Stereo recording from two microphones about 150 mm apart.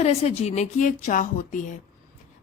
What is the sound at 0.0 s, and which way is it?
A woman's voice, 45° left (ahead or behind).